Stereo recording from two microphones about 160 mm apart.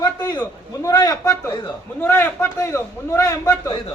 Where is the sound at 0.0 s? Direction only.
25° left (ahead or behind).